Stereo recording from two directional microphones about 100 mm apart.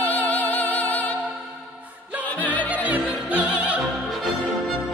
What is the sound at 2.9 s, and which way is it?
Opera, 15° right (ahead or behind).